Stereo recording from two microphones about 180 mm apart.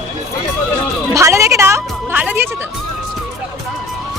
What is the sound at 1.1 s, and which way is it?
Music, 15° right (ahead or behind).